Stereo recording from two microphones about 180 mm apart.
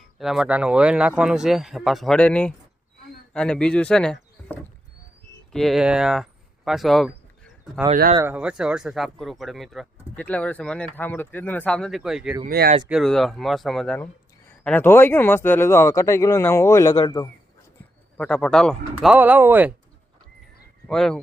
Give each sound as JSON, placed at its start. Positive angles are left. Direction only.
{"t": 0.2, "sound": "speech", "side_deg": 0}
{"t": 8.2, "sound": "speech", "side_deg": -10}
{"t": 12.5, "sound": "speech", "side_deg": -60}
{"t": 12.9, "sound": "speech", "side_deg": 0}
{"t": 18.2, "sound": "speech", "side_deg": 5}
{"t": 18.9, "sound": "speech", "side_deg": -10}
{"t": 20.8, "sound": "speech", "side_deg": 5}